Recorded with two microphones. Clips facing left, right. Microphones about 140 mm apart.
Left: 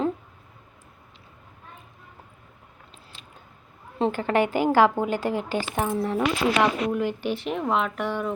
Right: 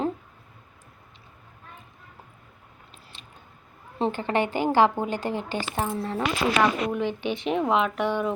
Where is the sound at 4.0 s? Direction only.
5° left (ahead or behind).